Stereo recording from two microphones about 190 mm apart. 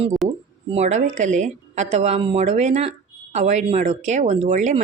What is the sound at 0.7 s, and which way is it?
A woman's voice, 35° right (ahead or behind).